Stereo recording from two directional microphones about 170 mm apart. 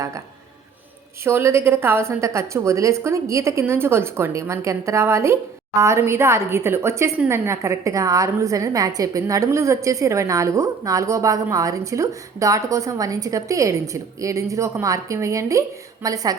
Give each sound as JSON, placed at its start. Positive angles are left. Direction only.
{"t": 1.2, "sound": "a woman's voice", "side_deg": -15}